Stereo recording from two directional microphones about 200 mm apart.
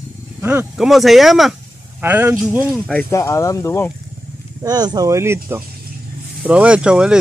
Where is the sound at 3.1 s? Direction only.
15° left (ahead or behind).